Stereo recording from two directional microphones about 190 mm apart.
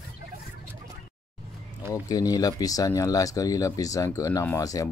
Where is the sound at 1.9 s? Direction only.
20° left (ahead or behind).